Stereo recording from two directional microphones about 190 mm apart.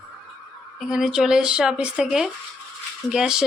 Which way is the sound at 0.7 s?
Centre (ahead or behind).